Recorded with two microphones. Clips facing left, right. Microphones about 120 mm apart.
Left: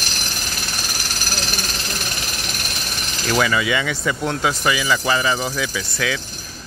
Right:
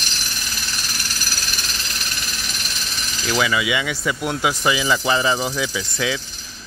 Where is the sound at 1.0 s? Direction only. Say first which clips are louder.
Left 4 dB; 50° left (ahead or behind).